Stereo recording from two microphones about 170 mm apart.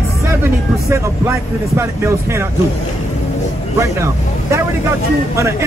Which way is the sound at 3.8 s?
15° right (ahead or behind).